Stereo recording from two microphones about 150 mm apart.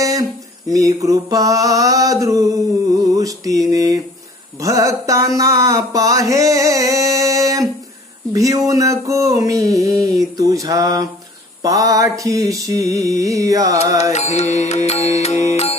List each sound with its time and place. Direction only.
0.0 s mantra: 25° right (ahead or behind)
3.1 s a sound: 25° right (ahead or behind)
14.1 s music: 50° left (ahead or behind)